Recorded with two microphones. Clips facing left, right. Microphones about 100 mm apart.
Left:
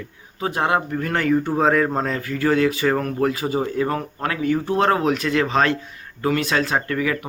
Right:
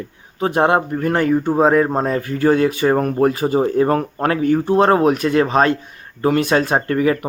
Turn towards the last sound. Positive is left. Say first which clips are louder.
# right 6 dB
turn(degrees=-35)  # may be behind; listen again after turning